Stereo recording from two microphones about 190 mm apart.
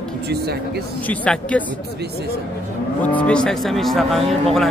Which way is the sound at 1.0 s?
5° left (ahead or behind).